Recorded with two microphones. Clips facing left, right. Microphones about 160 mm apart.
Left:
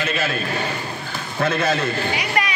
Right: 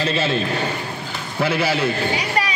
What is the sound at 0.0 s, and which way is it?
Speech, 30° right (ahead or behind).